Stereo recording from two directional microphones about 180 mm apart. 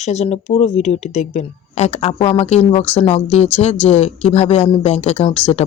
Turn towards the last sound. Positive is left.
turn(degrees=35)  # may be behind; listen again after turning